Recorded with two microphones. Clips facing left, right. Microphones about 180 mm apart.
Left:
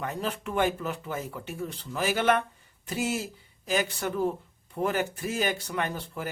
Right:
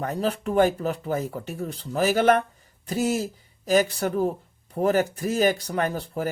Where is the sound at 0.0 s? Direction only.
40° right (ahead or behind).